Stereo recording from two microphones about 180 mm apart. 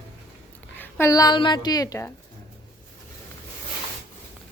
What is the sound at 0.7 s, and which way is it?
A woman's voice, 15° left (ahead or behind).